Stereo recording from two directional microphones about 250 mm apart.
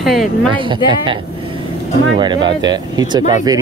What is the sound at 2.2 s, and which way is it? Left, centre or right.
Speech, centre.